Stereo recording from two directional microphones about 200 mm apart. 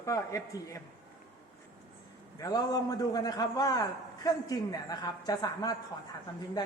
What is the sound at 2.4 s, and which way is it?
A woman's voice, 20° left (ahead or behind).